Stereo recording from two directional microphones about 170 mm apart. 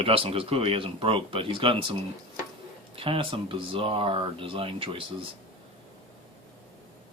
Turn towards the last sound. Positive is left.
turn(degrees=-30)  # may be behind; listen again after turning